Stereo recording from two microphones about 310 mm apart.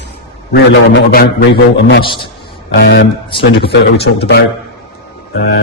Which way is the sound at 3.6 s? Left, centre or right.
Left.